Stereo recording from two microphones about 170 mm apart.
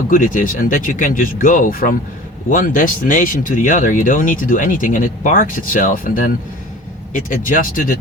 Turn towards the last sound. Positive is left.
turn(degrees=50)  # may be behind; listen again after turning